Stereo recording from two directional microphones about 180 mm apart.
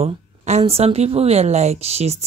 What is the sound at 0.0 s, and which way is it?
A woman's voice, 35° right (ahead or behind).